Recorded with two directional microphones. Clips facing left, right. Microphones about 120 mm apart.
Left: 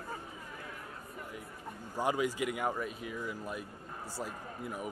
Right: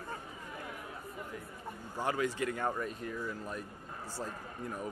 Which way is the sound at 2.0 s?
15° left (ahead or behind).